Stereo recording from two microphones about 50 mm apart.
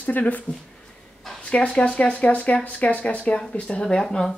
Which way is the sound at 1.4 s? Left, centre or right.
Left.